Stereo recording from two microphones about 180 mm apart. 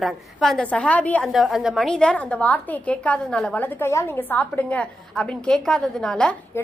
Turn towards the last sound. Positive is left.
turn(degrees=5)  # may be behind; listen again after turning